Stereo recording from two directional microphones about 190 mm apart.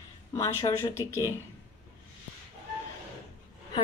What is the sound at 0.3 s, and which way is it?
Speech, 15° left (ahead or behind).